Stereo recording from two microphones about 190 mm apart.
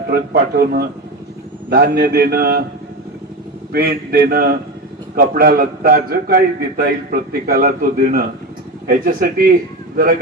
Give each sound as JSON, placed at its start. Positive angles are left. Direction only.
{"t": 0.1, "sound": "speech", "side_deg": -55}
{"t": 3.7, "sound": "a man's voice", "side_deg": -50}